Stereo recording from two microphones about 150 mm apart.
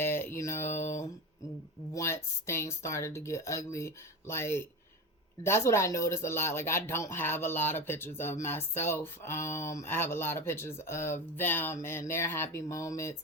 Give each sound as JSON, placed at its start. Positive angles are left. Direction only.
{"t": 0.0, "sound": "mantra", "side_deg": 15}
{"t": 1.9, "sound": "speech", "side_deg": 20}